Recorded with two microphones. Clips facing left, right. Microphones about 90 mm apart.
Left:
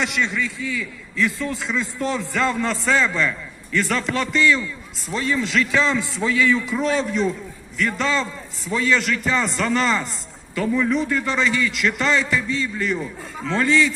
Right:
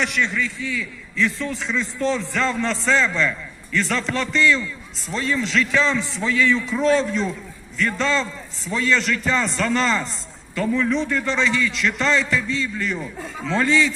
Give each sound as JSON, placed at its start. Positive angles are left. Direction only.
{"t": 0.0, "sound": "a man's voice", "side_deg": 15}
{"t": 6.6, "sound": "a man's voice", "side_deg": 5}